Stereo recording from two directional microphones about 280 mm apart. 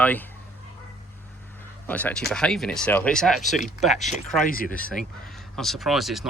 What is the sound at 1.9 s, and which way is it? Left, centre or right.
Speech, centre.